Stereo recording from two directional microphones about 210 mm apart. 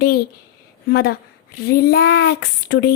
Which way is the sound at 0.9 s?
45° left (ahead or behind).